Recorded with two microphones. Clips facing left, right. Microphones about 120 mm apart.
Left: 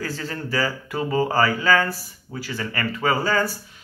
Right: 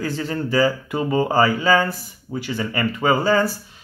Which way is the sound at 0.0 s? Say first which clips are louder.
Right 5 dB; 20° right (ahead or behind).